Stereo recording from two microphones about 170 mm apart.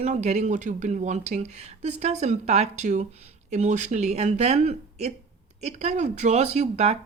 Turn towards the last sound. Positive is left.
turn(degrees=-40)  # may be behind; listen again after turning